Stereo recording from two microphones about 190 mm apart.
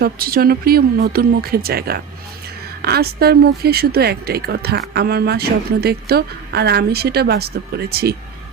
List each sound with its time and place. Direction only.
0.0 s a woman's voice: 50° right (ahead or behind)